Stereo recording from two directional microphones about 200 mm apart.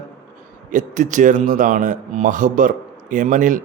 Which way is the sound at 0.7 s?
40° right (ahead or behind).